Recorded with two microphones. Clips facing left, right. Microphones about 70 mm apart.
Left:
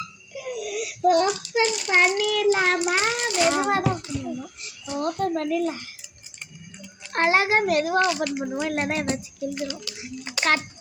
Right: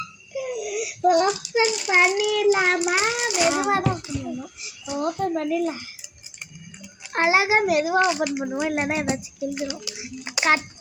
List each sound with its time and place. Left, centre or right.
0.5 s child singing: centre
4.0 s a child's voice: centre
7.1 s a child's voice: centre
8.0 s speech: centre